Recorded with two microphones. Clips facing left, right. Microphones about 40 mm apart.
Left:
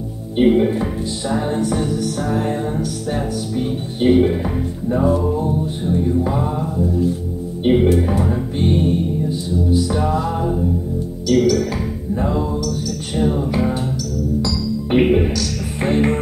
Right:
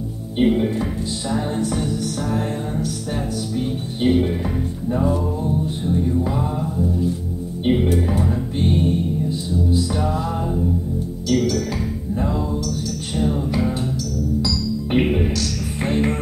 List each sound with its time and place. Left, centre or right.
0.4 s music: centre
10.1 s music: centre
14.9 s music: centre